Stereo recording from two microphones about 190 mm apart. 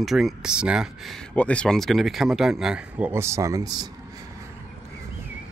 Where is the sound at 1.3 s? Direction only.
5° left (ahead or behind); by 3.8 s 20° right (ahead or behind).